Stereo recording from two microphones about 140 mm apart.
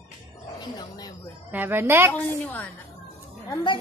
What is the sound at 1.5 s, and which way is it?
Speech, 15° right (ahead or behind).